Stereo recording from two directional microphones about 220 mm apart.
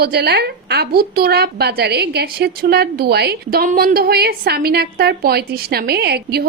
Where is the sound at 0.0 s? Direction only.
45° right (ahead or behind).